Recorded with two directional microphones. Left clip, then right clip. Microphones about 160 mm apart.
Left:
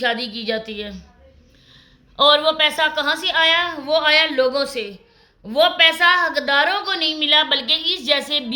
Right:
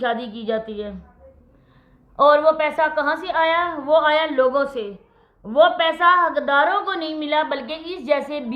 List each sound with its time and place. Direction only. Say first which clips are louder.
0.0 s a woman's voice: left 2 dB; 15° left (ahead or behind)
2.1 s a woman's voice: even; 20° left (ahead or behind)